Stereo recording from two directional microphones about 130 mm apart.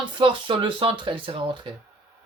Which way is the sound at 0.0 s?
35° right (ahead or behind).